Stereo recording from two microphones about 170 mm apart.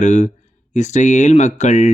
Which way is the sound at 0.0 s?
45° left (ahead or behind).